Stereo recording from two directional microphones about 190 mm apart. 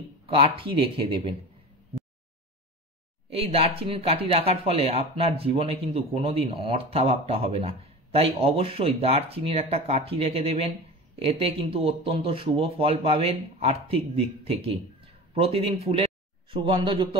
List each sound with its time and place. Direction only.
0.3 s speech: 30° right (ahead or behind)
3.3 s speech: 30° right (ahead or behind)